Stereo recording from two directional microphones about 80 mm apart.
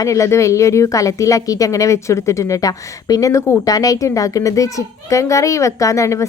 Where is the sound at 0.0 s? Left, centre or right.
Left.